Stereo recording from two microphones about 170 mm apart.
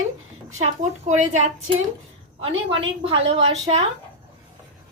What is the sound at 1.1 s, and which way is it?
Speech, 45° right (ahead or behind).